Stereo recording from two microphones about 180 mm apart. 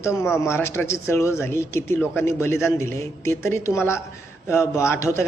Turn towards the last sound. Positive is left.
turn(degrees=15)  # may be behind; listen again after turning